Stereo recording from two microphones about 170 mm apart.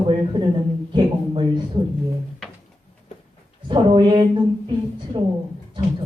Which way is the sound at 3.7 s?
30° right (ahead or behind).